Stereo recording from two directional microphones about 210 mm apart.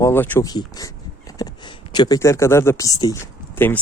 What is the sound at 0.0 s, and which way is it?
Speech, 10° left (ahead or behind).